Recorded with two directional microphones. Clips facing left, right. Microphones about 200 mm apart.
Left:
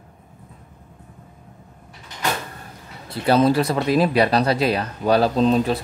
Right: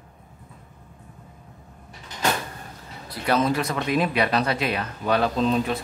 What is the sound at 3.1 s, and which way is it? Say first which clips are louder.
Speech: left 5 dB; 30° left (ahead or behind).